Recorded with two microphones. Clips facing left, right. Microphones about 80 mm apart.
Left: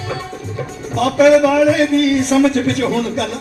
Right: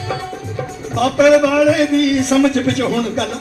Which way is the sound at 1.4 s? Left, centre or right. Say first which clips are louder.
Even; left.